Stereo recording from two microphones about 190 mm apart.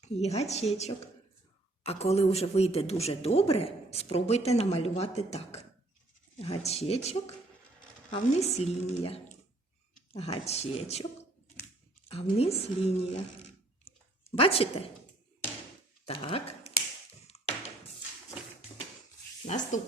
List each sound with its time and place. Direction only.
0.0 s a man's voice: 35° left (ahead or behind)
6.7 s a man's voice: 35° left (ahead or behind)
12.0 s a man's voice: 30° left (ahead or behind)
13.8 s a sound: 30° left (ahead or behind)
16.0 s speech: 30° left (ahead or behind)
17.3 s thunk: 35° left (ahead or behind)
19.5 s a man's voice: 40° left (ahead or behind)